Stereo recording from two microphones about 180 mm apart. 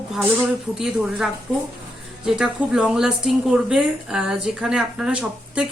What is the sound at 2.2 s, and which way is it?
A woman's voice, 5° right (ahead or behind).